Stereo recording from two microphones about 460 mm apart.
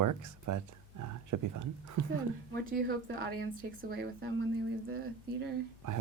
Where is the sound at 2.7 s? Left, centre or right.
Centre.